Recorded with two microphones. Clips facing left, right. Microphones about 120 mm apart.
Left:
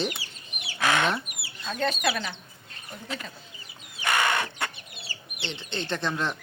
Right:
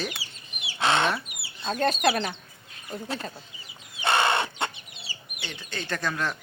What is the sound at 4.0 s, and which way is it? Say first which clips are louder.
Chicken: right 2 dB; 30° right (ahead or behind).